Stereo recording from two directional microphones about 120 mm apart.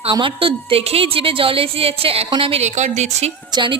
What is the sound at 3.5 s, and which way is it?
Speech, 40° right (ahead or behind).